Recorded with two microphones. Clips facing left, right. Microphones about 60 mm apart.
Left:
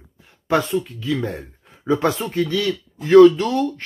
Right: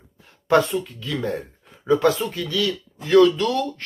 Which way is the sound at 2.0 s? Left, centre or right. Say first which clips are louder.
Left 1 dB; left.